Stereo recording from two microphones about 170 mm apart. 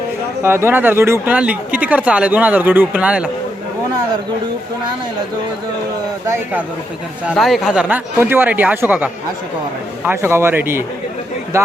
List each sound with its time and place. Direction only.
0.4 s speech: 15° right (ahead or behind)
6.2 s speech: 10° right (ahead or behind)
7.3 s speech: centre (ahead or behind); by 11.7 s 15° right (ahead or behind)